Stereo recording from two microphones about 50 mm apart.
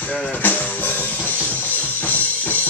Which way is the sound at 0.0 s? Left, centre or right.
Left.